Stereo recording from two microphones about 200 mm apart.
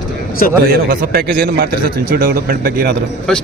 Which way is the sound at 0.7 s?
50° right (ahead or behind).